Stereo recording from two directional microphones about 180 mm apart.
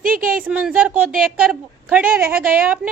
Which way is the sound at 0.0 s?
50° right (ahead or behind).